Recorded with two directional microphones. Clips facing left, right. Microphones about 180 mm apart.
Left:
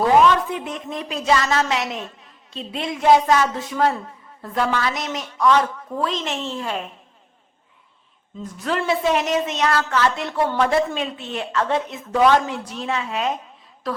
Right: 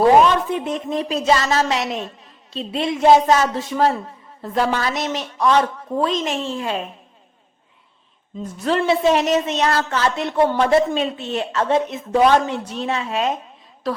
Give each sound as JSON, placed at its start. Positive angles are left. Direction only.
{"t": 0.5, "sound": "a woman's voice", "side_deg": -25}
{"t": 6.2, "sound": "a woman's voice", "side_deg": -15}
{"t": 8.4, "sound": "a woman's voice", "side_deg": -25}